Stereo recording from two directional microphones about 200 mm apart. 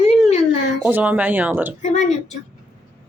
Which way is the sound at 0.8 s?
5° right (ahead or behind).